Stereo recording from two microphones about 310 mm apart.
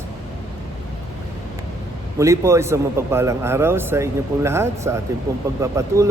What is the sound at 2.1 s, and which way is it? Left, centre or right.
A man's voice, centre.